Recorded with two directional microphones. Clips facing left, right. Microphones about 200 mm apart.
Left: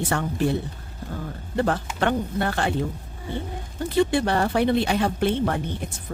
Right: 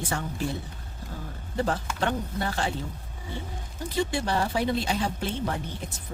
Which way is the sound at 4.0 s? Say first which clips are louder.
Left 6 dB; 60° left (ahead or behind).